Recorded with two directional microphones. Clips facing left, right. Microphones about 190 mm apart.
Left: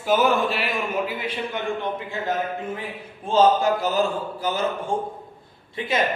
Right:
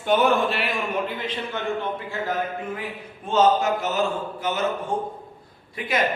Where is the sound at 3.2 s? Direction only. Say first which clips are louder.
Left 1 dB; 30° left (ahead or behind).